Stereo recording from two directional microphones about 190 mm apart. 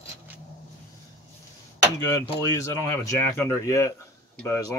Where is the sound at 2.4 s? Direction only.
20° left (ahead or behind).